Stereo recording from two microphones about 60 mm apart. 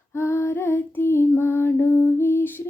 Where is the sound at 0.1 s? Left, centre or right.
Left.